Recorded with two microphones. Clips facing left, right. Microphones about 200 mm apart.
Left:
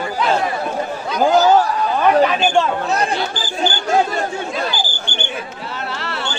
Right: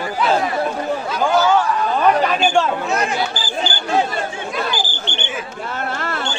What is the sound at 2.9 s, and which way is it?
Speech, 35° left (ahead or behind).